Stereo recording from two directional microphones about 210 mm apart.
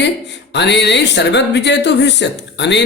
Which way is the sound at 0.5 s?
55° left (ahead or behind).